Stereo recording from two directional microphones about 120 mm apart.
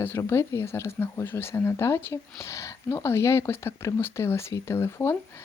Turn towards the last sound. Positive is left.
turn(degrees=20)  # may be behind; listen again after turning